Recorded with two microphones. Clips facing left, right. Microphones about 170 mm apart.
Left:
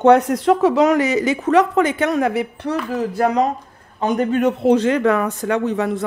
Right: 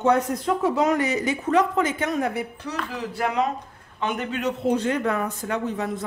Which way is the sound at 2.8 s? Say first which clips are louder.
Left 8 dB; 45° left (ahead or behind).